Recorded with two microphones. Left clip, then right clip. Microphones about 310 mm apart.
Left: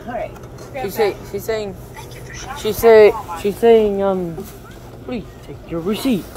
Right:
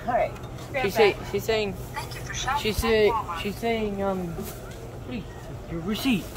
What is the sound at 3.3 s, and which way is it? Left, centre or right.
Speech, centre.